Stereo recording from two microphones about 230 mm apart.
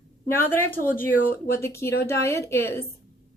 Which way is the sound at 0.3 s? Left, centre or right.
Centre.